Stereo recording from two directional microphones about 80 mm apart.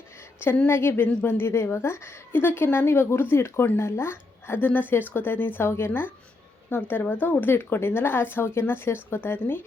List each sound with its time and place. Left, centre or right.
0.7 s a woman's voice: left